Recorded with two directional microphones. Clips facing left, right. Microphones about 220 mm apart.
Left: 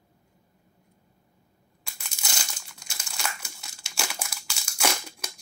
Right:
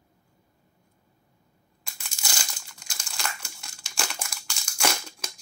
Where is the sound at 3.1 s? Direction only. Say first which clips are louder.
Even; 5° left (ahead or behind).